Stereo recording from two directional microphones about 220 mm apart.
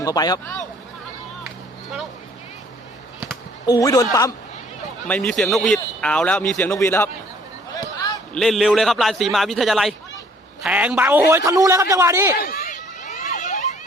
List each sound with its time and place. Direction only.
0.0 s speech: 15° left (ahead or behind)
3.7 s speech: 15° left (ahead or behind)
5.0 s a man's voice: 5° left (ahead or behind)
7.7 s a sound: 15° left (ahead or behind)
8.3 s a man's voice: centre (ahead or behind)
12.4 s a sound: 35° left (ahead or behind)